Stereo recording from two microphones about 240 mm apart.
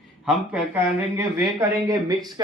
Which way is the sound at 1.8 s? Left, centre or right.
Centre.